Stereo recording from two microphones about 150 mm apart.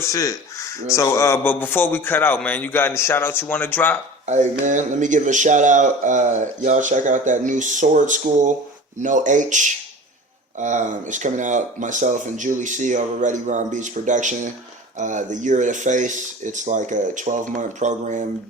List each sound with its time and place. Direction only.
0.0 s a man's voice: 25° left (ahead or behind)
4.3 s speech: 55° right (ahead or behind)